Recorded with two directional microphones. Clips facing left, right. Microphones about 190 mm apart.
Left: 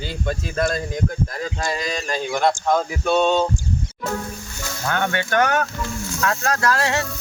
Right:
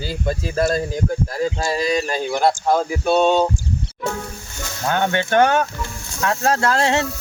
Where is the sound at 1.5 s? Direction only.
30° right (ahead or behind).